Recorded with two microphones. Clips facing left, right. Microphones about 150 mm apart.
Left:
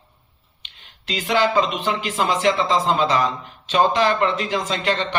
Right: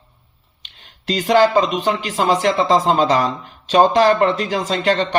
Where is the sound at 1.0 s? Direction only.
40° right (ahead or behind).